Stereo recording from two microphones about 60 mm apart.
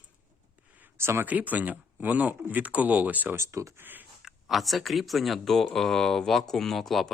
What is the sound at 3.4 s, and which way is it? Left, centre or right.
Speech, right.